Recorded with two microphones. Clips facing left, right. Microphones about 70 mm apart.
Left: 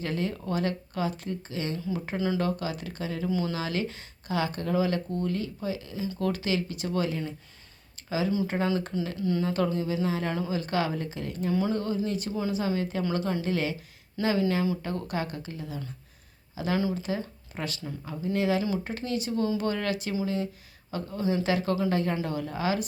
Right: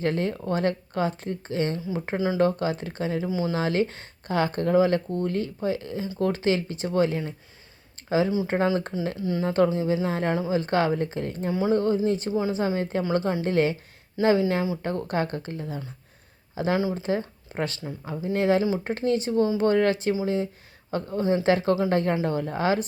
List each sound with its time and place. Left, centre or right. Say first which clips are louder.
0.0 s speech: right 5 dB; right
1.9 s speech: right 3 dB; right
2.4 s speech: right 7 dB; right
3.2 s speech: right 2 dB; centre
3.5 s speech: right 6 dB; right
14.8 s speech: right 5 dB; right